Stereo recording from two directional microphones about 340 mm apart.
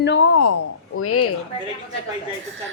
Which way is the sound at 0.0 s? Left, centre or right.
Left.